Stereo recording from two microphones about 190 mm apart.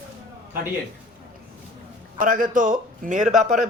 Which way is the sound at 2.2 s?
45° right (ahead or behind).